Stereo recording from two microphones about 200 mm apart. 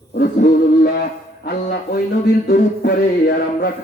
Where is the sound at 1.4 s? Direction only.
50° left (ahead or behind).